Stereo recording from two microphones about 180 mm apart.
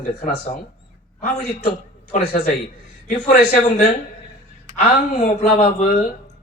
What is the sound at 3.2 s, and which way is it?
Speech, 40° left (ahead or behind).